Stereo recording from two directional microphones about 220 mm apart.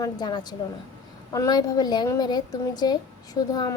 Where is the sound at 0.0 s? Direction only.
20° left (ahead or behind).